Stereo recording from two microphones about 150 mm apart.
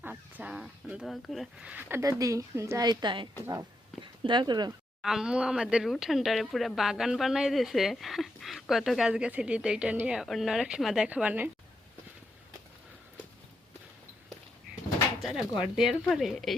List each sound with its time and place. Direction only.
0.0 s speech: 10° right (ahead or behind); by 4.7 s 30° right (ahead or behind)
5.0 s speech: 5° right (ahead or behind)
15.2 s speech: centre (ahead or behind)